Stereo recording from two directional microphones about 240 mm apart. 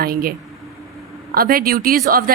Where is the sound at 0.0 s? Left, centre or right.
Right.